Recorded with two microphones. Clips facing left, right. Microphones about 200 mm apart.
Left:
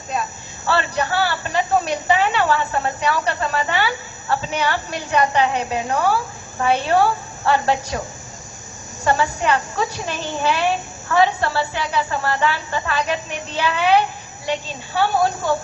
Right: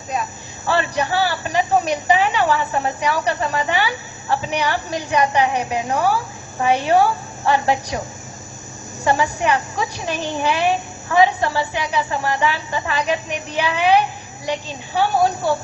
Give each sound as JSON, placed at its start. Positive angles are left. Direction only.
{"t": 0.7, "sound": "a woman's voice", "side_deg": -15}
{"t": 9.0, "sound": "a woman's voice", "side_deg": -15}